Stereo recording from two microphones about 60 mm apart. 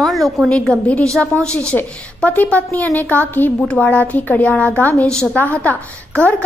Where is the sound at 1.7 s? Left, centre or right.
Left.